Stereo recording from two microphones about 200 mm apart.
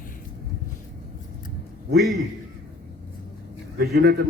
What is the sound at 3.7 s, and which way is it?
Speech, 50° right (ahead or behind).